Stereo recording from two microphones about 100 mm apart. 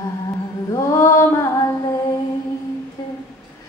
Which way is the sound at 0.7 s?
35° left (ahead or behind).